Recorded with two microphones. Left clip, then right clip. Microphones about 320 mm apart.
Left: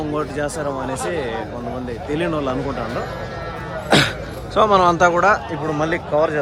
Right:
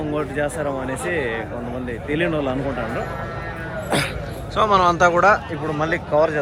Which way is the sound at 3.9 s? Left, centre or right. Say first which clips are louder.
Left 7 dB; left.